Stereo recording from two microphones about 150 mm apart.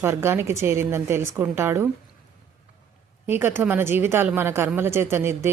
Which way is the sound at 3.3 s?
15° right (ahead or behind).